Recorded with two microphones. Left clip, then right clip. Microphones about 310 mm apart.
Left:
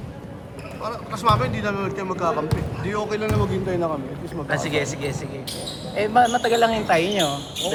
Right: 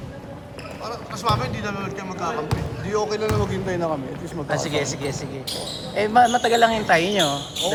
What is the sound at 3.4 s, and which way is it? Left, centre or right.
Speech, right.